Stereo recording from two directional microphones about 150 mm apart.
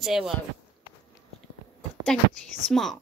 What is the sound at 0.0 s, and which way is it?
Speech, centre (ahead or behind).